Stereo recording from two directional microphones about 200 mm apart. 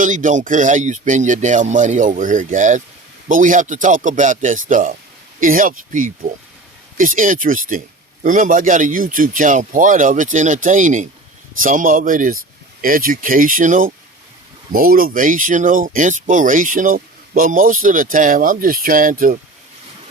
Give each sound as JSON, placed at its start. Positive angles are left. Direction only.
{"t": 0.0, "sound": "speech", "side_deg": -40}